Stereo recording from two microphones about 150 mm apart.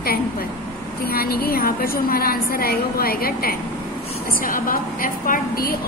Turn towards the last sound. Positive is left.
turn(degrees=75)  # may be behind; listen again after turning